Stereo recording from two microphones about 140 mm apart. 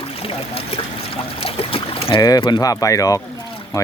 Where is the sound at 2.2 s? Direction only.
30° left (ahead or behind).